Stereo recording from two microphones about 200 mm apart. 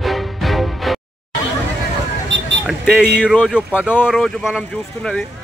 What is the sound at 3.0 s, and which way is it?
Speech, 5° left (ahead or behind).